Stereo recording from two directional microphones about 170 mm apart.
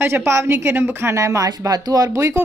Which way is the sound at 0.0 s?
15° right (ahead or behind).